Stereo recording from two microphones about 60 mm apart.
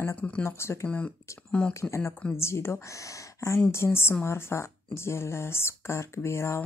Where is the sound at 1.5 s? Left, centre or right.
Centre.